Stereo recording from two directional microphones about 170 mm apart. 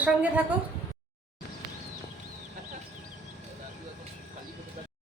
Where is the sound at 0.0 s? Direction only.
10° right (ahead or behind).